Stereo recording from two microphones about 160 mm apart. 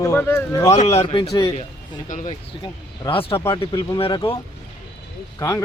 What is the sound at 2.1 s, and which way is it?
Speech, 50° left (ahead or behind).